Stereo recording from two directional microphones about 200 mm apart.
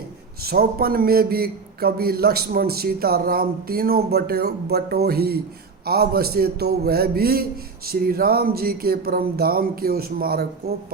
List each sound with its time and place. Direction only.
0.4 s a man's voice: 50° right (ahead or behind)